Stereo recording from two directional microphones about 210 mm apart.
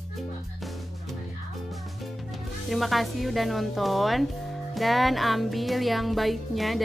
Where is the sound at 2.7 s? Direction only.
Centre (ahead or behind).